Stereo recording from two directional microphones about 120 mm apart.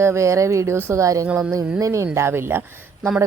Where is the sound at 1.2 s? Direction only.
10° right (ahead or behind).